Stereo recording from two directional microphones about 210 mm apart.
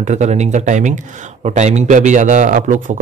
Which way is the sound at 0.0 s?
35° right (ahead or behind).